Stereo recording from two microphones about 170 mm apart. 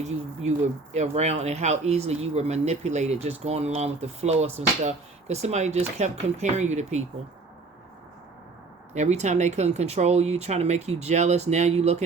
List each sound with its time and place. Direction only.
0.0 s speech: 40° right (ahead or behind)
8.9 s speech: 40° right (ahead or behind)